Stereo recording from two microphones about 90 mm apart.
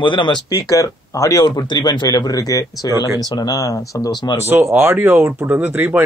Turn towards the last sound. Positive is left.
turn(degrees=-20)  # may be behind; listen again after turning